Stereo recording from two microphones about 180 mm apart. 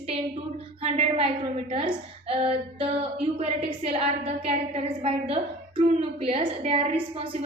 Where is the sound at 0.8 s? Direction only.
30° right (ahead or behind).